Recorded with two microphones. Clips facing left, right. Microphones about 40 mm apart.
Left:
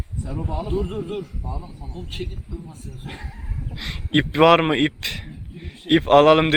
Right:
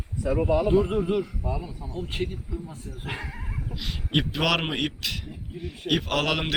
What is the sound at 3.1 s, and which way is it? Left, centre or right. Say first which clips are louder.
Speech: right 3 dB; right.